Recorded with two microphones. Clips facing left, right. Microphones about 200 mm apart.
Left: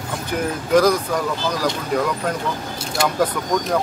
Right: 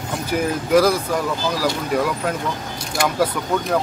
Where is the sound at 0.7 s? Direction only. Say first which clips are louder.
Even; 5° right (ahead or behind).